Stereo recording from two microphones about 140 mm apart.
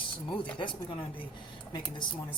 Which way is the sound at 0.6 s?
35° left (ahead or behind).